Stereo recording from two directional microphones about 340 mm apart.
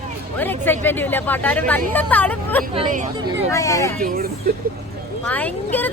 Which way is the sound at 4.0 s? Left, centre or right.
Right.